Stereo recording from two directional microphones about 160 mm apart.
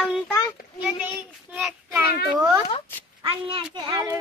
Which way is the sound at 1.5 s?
5° right (ahead or behind).